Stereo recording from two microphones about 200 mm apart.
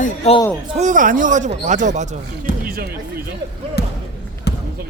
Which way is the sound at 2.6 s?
50° right (ahead or behind).